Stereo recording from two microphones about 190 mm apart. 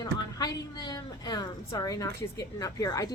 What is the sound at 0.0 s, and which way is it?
A woman's voice, 20° left (ahead or behind).